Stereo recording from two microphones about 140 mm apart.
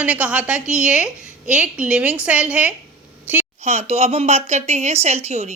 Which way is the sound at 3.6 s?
50° right (ahead or behind).